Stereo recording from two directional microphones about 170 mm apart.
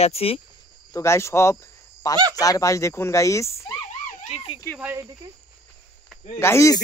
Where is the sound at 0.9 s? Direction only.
15° left (ahead or behind).